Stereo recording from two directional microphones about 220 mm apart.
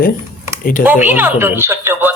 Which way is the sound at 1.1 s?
10° right (ahead or behind).